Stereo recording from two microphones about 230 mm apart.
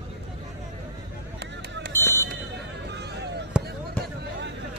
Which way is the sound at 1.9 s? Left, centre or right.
Centre.